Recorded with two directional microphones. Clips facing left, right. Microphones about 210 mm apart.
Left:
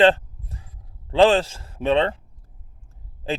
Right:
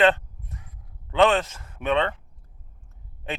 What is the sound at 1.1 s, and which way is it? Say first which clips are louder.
Speech: left 4 dB; 30° left (ahead or behind).